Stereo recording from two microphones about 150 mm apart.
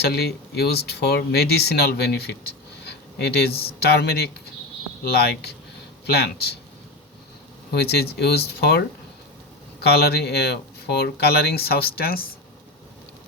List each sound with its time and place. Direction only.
0.0 s speech: 90° left
2.8 s a sound: 90° left
3.5 s speech: 40° left (ahead or behind)
3.8 s speech: 90° left
7.7 s speech: 90° left
9.8 s speech: 90° left